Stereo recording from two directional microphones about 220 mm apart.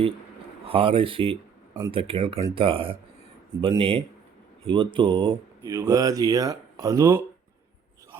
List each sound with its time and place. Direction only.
0.7 s speech: 25° right (ahead or behind)